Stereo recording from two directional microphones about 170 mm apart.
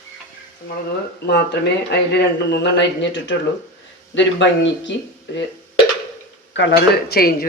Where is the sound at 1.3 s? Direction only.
80° left.